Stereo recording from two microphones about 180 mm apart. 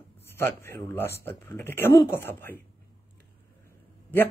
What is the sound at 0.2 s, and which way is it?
A man's voice, 15° left (ahead or behind).